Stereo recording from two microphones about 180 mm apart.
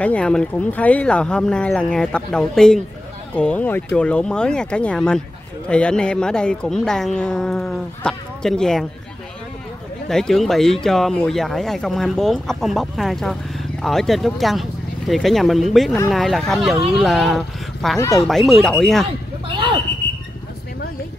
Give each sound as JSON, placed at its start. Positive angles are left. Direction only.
{"t": 0.0, "sound": "speech", "side_deg": 5}
{"t": 10.0, "sound": "speech", "side_deg": 0}
{"t": 17.9, "sound": "speech", "side_deg": 15}
{"t": 18.2, "sound": "speech", "side_deg": 0}
{"t": 19.4, "sound": "a sound", "side_deg": -25}